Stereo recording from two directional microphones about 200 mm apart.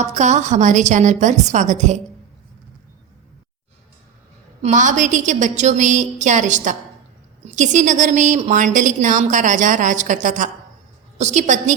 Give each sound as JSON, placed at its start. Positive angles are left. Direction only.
{"t": 0.0, "sound": "a woman's voice", "side_deg": -35}
{"t": 4.6, "sound": "a woman's voice", "side_deg": -35}